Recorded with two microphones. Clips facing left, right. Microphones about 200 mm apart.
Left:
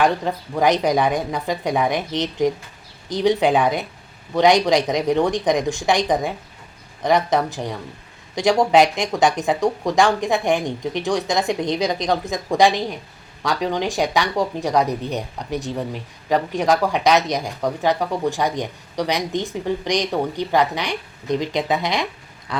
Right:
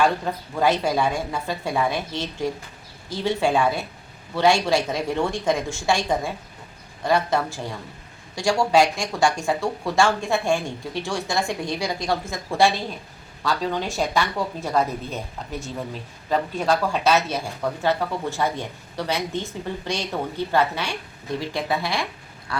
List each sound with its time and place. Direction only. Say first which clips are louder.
0.0 s speech: left 2 dB; 15° left (ahead or behind)
16.6 s speech: left 4 dB; 15° left (ahead or behind)